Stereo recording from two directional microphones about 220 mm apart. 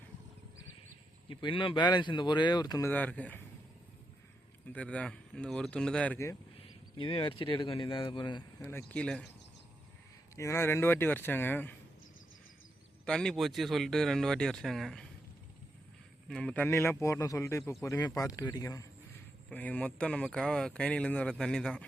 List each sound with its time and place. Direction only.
1.3 s speech: 20° left (ahead or behind); by 3.4 s 5° left (ahead or behind)
4.7 s speech: 5° left (ahead or behind)
6.6 s speech: 25° left (ahead or behind); by 9.2 s 5° left (ahead or behind)
10.3 s speech: 10° left (ahead or behind)
13.1 s speech: 5° left (ahead or behind)
16.3 s speech: 5° left (ahead or behind)